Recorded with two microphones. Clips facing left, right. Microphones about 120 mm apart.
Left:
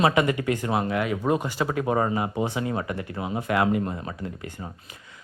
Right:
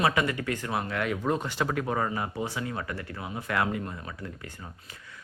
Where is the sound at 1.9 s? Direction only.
25° left (ahead or behind).